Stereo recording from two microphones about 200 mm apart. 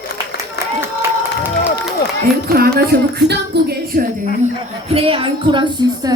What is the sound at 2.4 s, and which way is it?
Music, 50° right (ahead or behind).